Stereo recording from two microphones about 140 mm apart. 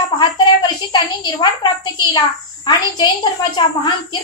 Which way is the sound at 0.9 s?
30° left (ahead or behind).